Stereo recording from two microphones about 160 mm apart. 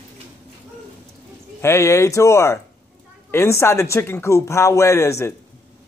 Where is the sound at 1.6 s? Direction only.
15° left (ahead or behind).